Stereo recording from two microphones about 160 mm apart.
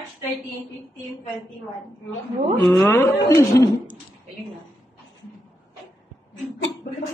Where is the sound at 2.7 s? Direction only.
15° left (ahead or behind).